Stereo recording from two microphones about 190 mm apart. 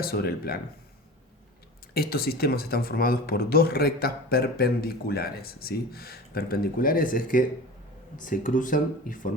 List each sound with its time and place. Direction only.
0.0 s speech: 55° left (ahead or behind)
1.9 s speech: 55° left (ahead or behind)